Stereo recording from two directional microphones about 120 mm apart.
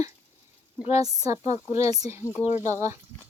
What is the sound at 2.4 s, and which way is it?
Speech, 75° left (ahead or behind).